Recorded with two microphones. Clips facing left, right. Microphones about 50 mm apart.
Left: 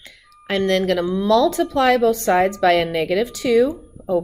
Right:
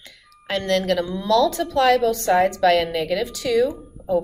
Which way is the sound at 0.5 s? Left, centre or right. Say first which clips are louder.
Left 2 dB; left.